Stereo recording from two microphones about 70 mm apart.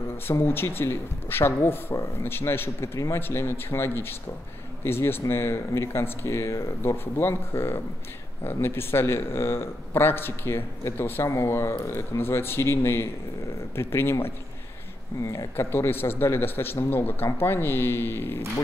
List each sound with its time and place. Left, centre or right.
0.3 s speech: left
11.2 s speech: left
15.5 s speech: left